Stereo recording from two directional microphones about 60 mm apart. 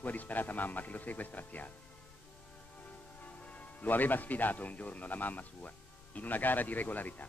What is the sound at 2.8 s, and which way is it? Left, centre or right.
A man's voice, left.